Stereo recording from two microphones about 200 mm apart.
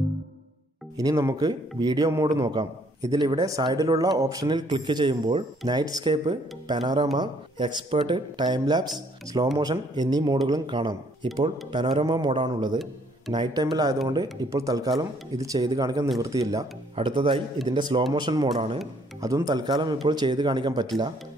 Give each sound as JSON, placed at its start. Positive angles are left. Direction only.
{"t": 0.9, "sound": "speech", "side_deg": -15}